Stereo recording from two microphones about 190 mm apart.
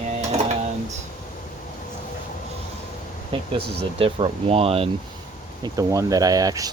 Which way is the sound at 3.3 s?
30° right (ahead or behind).